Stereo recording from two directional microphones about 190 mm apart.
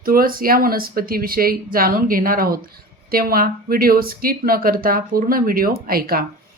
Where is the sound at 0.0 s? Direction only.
50° right (ahead or behind).